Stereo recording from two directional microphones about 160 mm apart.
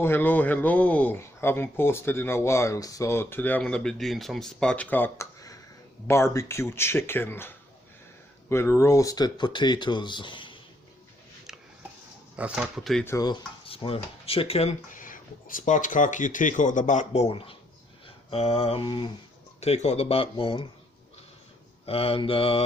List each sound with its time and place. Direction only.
0.0 s speech: 15° left (ahead or behind); by 10.6 s 30° left (ahead or behind)
12.4 s speech: 5° right (ahead or behind)
13.1 s speech: 25° left (ahead or behind); by 14.9 s 40° left (ahead or behind)
14.9 s speech: 55° left (ahead or behind); by 17.6 s 35° left (ahead or behind)
18.0 s a sound: 35° left (ahead or behind)
19.5 s speech: 40° left (ahead or behind)
21.8 s speech: 35° left (ahead or behind)